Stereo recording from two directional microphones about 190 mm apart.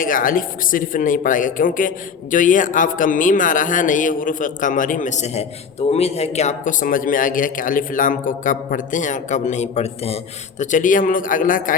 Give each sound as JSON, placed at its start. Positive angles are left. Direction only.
{"t": 0.0, "sound": "speech", "side_deg": 45}